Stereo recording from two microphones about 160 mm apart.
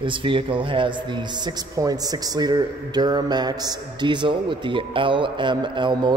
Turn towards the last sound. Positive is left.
turn(degrees=-30)  # may be behind; listen again after turning